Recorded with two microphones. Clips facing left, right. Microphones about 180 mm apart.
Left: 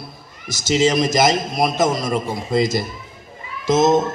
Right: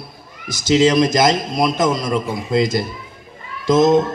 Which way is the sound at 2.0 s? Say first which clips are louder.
Right 1 dB; 50° left (ahead or behind).